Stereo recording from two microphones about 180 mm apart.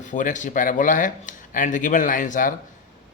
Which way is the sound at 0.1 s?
45° left (ahead or behind).